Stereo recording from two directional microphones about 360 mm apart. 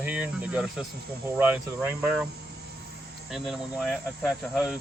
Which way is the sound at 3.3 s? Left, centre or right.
Centre.